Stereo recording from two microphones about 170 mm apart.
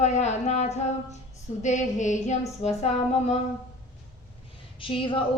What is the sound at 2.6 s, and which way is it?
Speech, 40° left (ahead or behind).